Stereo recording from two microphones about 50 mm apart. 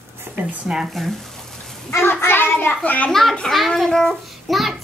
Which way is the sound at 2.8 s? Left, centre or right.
Left.